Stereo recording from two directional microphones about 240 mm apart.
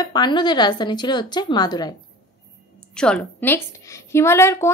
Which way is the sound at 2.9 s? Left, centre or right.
Centre.